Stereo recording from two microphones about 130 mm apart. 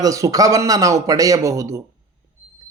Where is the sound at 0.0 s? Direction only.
25° right (ahead or behind).